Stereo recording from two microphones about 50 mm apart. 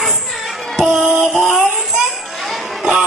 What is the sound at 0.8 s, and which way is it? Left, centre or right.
Music, centre.